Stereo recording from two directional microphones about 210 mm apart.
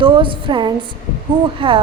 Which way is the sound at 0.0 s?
25° right (ahead or behind).